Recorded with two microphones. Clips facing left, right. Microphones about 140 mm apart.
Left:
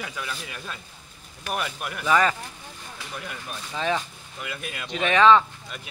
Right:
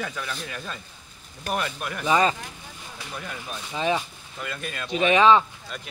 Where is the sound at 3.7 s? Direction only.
15° right (ahead or behind).